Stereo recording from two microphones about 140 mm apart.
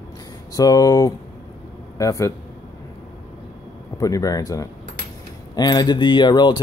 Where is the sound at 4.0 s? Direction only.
25° left (ahead or behind).